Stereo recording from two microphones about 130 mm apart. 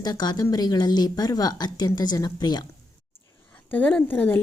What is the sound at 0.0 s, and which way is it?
Speech, 30° left (ahead or behind).